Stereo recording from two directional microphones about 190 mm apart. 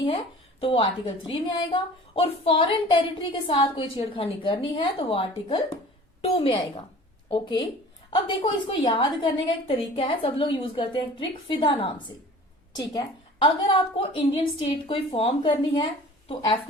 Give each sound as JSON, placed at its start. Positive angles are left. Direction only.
{"t": 0.6, "sound": "a woman's voice", "side_deg": 30}
{"t": 8.7, "sound": "a woman's voice", "side_deg": 25}